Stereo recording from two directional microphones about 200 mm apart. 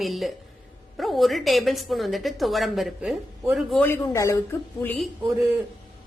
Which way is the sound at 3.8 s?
15° left (ahead or behind).